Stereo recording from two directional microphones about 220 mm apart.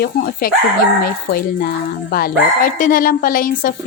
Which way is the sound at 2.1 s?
45° left (ahead or behind).